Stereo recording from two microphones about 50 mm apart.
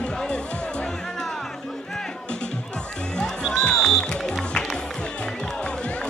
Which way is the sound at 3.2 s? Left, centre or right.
Centre.